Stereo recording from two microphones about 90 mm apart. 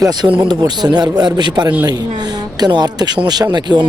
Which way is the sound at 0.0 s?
50° right (ahead or behind).